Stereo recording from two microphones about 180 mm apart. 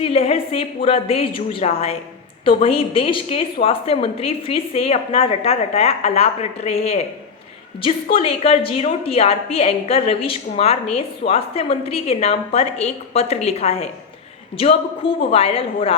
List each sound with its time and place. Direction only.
0.0 s a woman's voice: 35° left (ahead or behind)
8.1 s a woman's voice: 35° left (ahead or behind)